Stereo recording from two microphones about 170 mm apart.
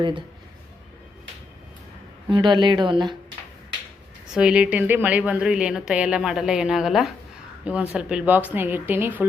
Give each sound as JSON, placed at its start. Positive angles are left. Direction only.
{"t": 2.3, "sound": "speech", "side_deg": -25}
{"t": 4.4, "sound": "a woman's voice", "side_deg": -5}